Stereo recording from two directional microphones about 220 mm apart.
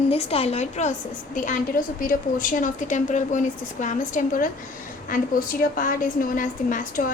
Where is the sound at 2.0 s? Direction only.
40° left (ahead or behind).